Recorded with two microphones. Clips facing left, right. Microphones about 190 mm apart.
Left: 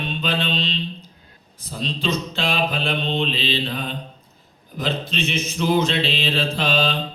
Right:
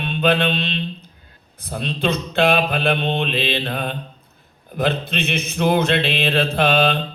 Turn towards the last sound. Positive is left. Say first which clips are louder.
# right 4 dB
turn(degrees=-60)  # may be behind; listen again after turning